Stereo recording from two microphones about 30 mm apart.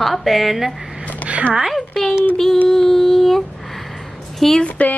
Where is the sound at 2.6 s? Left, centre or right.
Centre.